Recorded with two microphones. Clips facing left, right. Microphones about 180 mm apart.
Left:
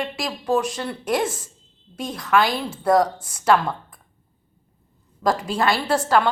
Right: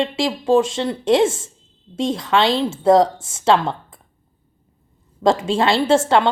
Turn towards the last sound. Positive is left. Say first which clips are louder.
# right 5 dB
turn(degrees=-25)  # may be behind; listen again after turning